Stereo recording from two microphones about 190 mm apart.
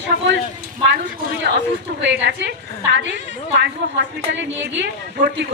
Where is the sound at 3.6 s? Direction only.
70° right (ahead or behind).